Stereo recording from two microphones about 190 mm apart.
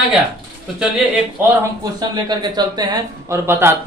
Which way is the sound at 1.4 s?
20° right (ahead or behind).